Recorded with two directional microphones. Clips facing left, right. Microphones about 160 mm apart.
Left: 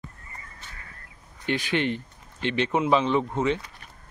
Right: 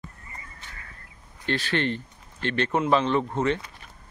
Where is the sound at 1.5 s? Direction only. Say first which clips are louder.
Left 1 dB; 15° left (ahead or behind).